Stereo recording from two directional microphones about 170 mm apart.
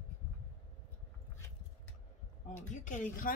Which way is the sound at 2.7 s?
45° left (ahead or behind).